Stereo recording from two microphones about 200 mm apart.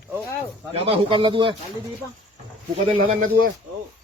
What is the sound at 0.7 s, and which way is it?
Speech, 25° right (ahead or behind).